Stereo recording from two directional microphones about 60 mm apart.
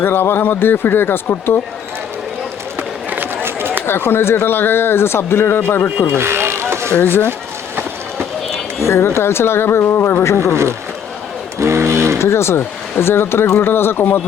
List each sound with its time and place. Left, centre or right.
0.0 s speech: left
2.7 s a sound: right
3.8 s speech: left
6.1 s a sound: right
7.0 s speech: left
8.8 s speech: left
10.5 s speech: right
11.6 s a sound: right
12.2 s speech: left